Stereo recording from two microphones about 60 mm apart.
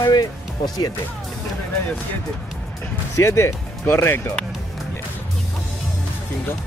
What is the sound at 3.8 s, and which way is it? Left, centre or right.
Speech, left.